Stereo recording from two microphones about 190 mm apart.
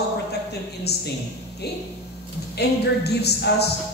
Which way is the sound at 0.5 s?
60° left (ahead or behind).